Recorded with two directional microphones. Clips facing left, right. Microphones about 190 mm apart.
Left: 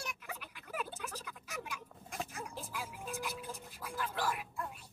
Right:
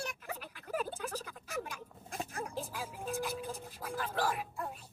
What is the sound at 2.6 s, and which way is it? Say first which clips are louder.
Music: right 4 dB; 30° right (ahead or behind).